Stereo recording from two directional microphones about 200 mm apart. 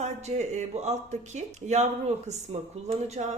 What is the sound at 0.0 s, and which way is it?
A woman's voice, 35° right (ahead or behind).